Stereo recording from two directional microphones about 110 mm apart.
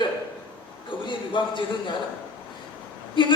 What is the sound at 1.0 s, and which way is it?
Speech, 45° left (ahead or behind).